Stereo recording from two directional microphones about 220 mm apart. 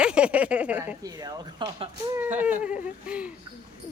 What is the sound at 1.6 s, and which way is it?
Speech, 20° right (ahead or behind).